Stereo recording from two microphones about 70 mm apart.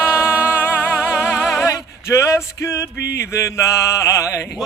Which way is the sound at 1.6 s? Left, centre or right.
Left.